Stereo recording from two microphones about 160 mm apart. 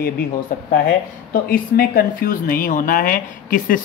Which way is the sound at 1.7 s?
60° left (ahead or behind).